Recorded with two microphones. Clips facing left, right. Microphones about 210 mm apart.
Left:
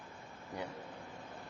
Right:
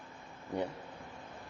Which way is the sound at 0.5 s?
30° right (ahead or behind).